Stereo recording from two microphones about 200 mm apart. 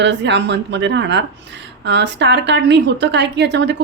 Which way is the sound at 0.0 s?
60° right (ahead or behind).